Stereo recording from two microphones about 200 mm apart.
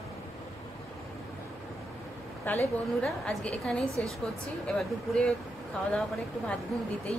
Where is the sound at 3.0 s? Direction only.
5° left (ahead or behind).